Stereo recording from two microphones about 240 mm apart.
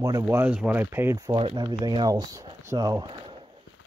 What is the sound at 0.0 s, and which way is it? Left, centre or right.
Speech, centre.